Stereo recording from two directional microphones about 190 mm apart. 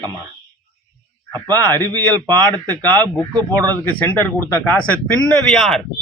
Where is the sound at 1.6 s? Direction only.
10° left (ahead or behind).